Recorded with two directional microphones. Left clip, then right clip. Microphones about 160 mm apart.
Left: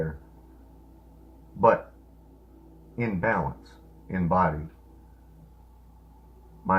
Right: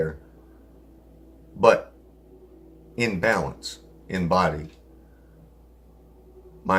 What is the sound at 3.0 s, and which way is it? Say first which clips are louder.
Speech: right 4 dB; 40° right (ahead or behind).